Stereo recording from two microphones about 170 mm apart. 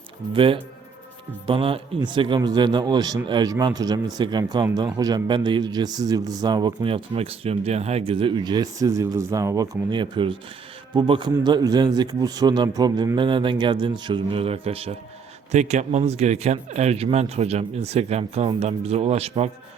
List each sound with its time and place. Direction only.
0.3 s a man's voice: 30° right (ahead or behind)